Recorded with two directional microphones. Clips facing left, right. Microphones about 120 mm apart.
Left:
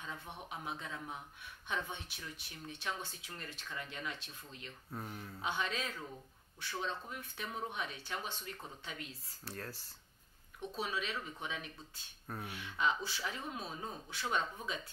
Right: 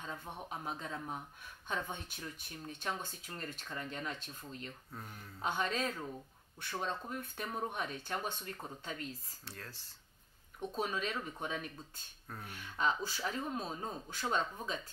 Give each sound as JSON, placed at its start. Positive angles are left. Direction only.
{"t": 0.5, "sound": "speech", "side_deg": -40}
{"t": 9.4, "sound": "speech", "side_deg": 10}
{"t": 10.8, "sound": "speech", "side_deg": -45}
{"t": 12.3, "sound": "speech", "side_deg": 15}
{"t": 12.5, "sound": "speech", "side_deg": -40}